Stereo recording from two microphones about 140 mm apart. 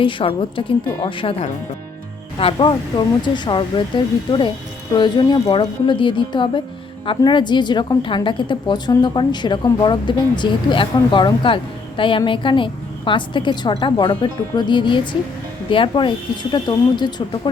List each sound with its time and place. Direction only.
0.0 s a woman's voice: 40° left (ahead or behind)